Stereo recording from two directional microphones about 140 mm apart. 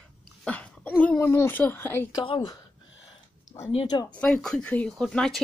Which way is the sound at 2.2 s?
35° left (ahead or behind).